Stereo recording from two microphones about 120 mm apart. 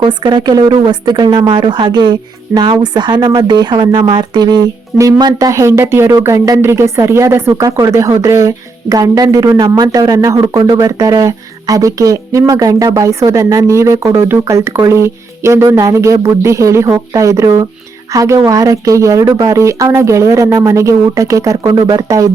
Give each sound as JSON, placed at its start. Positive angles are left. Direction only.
{"t": 0.0, "sound": "a woman's voice", "side_deg": -40}